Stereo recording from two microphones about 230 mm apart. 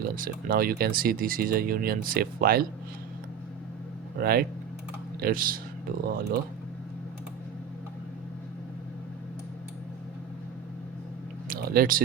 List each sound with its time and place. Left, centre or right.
0.0 s speech: right
4.2 s speech: right
11.4 s a sound: right